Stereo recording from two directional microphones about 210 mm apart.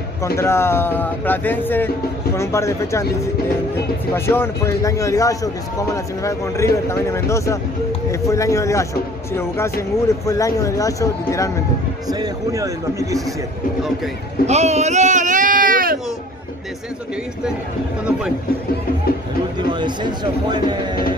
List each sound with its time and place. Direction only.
0.4 s speech: 10° left (ahead or behind)
4.1 s speech: 10° left (ahead or behind)
12.1 s a man's voice: 15° right (ahead or behind)
14.4 s speech: 30° right (ahead or behind)
19.7 s speech: 20° right (ahead or behind)